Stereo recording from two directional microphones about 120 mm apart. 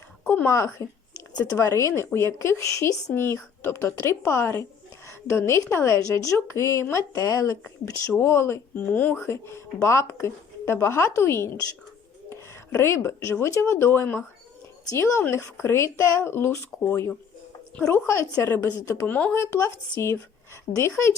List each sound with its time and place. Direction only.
0.3 s a woman's voice: 20° left (ahead or behind)